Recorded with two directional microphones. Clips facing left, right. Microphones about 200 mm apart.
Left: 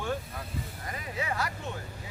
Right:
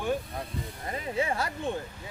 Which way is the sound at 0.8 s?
30° right (ahead or behind).